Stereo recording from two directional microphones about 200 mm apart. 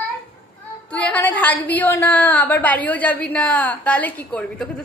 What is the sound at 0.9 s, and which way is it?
A woman's voice, 5° left (ahead or behind).